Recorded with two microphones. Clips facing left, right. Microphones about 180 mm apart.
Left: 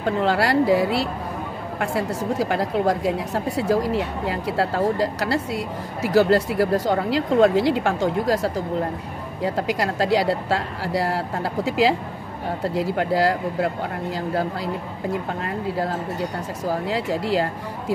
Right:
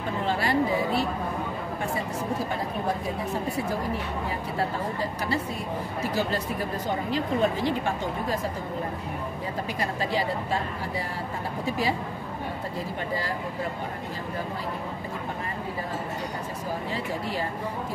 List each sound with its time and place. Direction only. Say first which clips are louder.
0.0 s speech: left 7 dB; 90° left
16.8 s speech: left 7 dB; 90° left